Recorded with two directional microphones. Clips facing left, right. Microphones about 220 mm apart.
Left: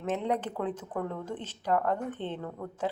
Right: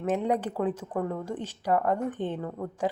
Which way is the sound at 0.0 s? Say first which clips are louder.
Right 4 dB; 10° right (ahead or behind).